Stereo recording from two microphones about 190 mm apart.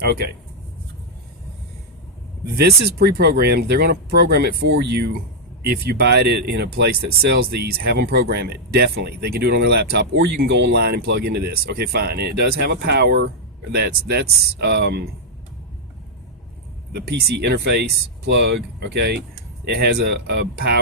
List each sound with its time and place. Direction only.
0.0 s speech: 55° right (ahead or behind)
2.6 s speech: 60° right (ahead or behind)
16.9 s speech: 55° right (ahead or behind)